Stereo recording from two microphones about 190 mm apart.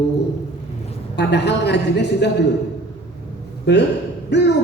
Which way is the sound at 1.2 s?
65° left (ahead or behind).